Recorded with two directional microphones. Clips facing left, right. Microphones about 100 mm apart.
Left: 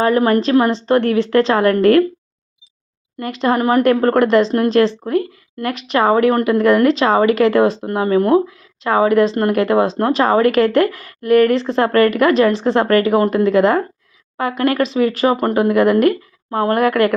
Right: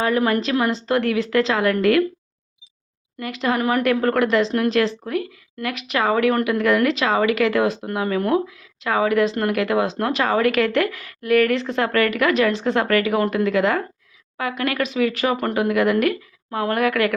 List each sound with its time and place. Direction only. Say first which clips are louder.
0.0 s a woman's voice: left 5 dB; 35° left (ahead or behind)
3.2 s a woman's voice: left 5 dB; 40° left (ahead or behind)